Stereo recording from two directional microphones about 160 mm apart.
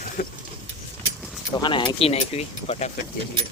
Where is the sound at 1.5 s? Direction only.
30° left (ahead or behind).